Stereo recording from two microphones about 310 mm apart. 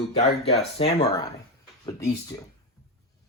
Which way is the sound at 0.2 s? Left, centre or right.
Centre.